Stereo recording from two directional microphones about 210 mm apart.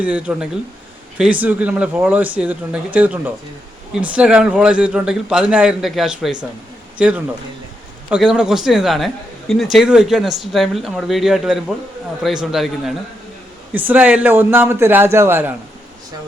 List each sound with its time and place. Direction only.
0.0 s a man's voice: 5° right (ahead or behind)
8.1 s a man's voice: 5° right (ahead or behind)